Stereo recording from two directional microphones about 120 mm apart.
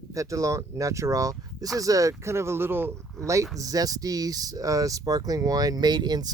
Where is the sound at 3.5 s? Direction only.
30° right (ahead or behind).